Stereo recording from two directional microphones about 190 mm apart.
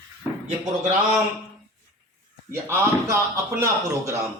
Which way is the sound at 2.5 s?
15° right (ahead or behind).